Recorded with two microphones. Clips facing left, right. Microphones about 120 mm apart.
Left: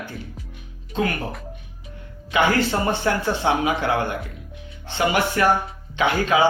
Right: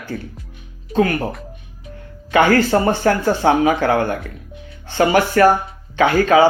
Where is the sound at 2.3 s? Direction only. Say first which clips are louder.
Right 6 dB; 50° right (ahead or behind).